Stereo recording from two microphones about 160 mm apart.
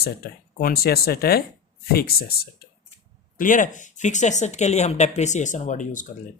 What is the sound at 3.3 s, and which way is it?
Speech, 55° left (ahead or behind).